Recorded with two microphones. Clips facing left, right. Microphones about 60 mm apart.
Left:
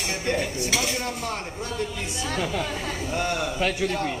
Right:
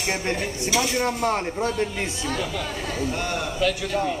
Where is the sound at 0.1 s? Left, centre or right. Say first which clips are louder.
Even; right.